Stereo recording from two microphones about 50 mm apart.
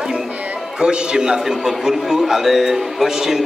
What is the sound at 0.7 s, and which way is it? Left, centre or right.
A man's voice, centre.